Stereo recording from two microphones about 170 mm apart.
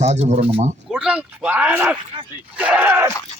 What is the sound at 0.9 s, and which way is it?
Speech, 5° right (ahead or behind).